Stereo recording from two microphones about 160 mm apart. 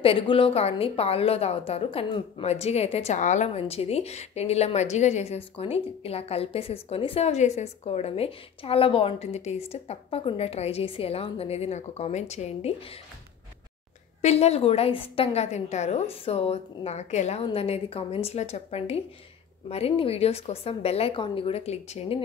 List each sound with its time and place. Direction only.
0.0 s a woman's voice: 35° left (ahead or behind)
14.2 s a woman's voice: 40° left (ahead or behind)